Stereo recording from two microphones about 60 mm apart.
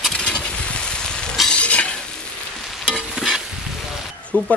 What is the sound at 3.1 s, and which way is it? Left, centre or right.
Stir, centre.